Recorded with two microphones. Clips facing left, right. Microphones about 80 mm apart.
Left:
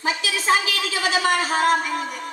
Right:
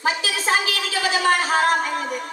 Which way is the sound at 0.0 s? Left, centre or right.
Right.